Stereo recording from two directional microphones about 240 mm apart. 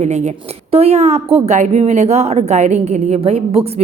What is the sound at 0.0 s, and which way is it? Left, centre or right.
A woman's voice, right.